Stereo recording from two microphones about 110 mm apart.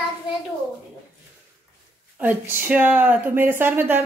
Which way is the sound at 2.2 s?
20° right (ahead or behind).